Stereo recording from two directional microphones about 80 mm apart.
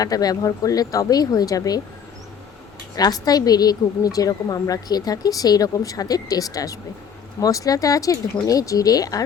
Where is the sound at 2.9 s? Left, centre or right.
Left.